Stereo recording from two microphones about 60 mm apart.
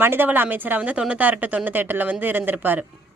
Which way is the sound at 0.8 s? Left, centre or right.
Centre.